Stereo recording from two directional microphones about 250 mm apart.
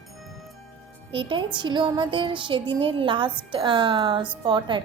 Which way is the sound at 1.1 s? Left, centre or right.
Centre.